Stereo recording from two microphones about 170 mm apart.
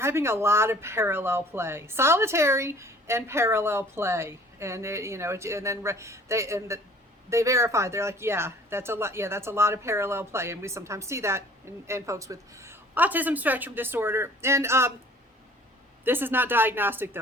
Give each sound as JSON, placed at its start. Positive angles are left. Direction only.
{"t": 0.0, "sound": "speech", "side_deg": -15}
{"t": 16.0, "sound": "speech", "side_deg": -10}